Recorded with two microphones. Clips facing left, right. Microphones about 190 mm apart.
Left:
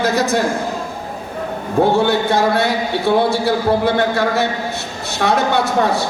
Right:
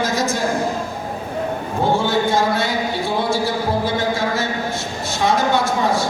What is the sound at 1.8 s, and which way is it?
A man's voice, 65° left (ahead or behind).